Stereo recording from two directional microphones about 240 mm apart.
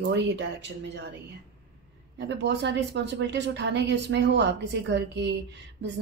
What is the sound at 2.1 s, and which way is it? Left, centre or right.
A woman's voice, right.